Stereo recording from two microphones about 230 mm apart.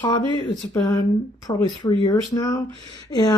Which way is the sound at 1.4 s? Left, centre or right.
Centre.